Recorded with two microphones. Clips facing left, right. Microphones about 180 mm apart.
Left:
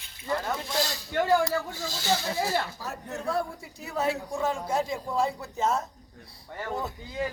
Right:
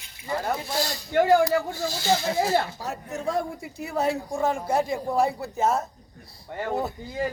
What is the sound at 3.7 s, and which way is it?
Speech, 50° right (ahead or behind).